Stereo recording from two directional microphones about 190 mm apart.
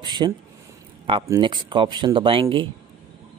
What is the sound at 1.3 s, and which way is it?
Speech, 25° right (ahead or behind).